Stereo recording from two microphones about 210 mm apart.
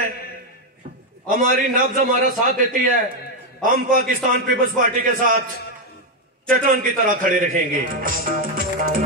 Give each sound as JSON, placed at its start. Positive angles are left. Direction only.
{"t": 1.3, "sound": "a man's voice", "side_deg": -40}
{"t": 6.5, "sound": "speech", "side_deg": -40}